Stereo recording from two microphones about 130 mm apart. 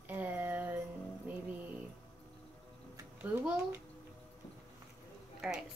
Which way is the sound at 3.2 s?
10° right (ahead or behind).